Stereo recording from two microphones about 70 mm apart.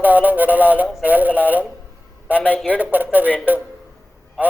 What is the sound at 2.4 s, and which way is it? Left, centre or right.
Speech, left.